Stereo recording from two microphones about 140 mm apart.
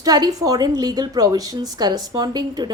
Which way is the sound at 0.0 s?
25° right (ahead or behind).